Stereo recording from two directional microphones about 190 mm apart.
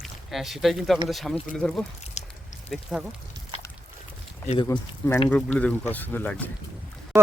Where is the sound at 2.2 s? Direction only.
35° left (ahead or behind).